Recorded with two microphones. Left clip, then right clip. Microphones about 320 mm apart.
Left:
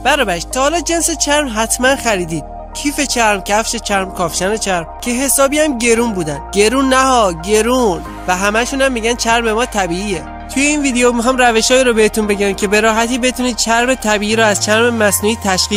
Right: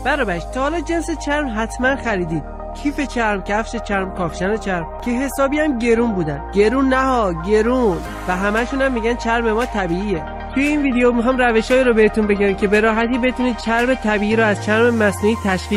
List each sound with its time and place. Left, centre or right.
0.0 s speech: left